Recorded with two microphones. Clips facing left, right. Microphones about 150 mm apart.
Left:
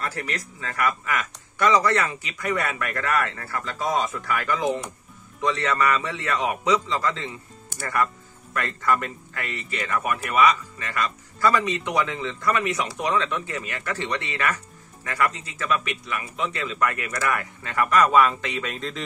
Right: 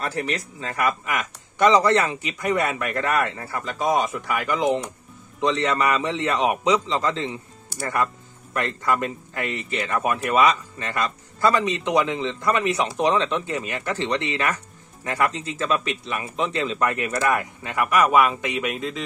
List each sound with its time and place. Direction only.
0.0 s speech: 25° right (ahead or behind); by 19.0 s 5° right (ahead or behind)